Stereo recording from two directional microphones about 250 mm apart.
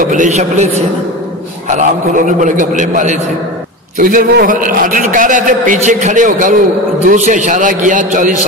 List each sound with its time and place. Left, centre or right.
0.0 s a man's voice: right